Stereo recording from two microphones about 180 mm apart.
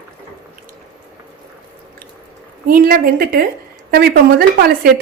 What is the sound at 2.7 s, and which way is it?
A woman's voice, 55° right (ahead or behind).